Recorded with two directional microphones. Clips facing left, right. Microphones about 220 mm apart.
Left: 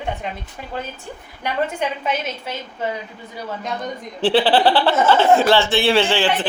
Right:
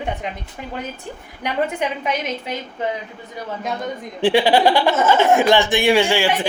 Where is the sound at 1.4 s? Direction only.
15° right (ahead or behind).